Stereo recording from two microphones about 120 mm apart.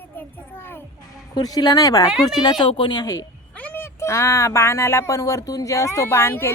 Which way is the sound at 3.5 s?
15° left (ahead or behind).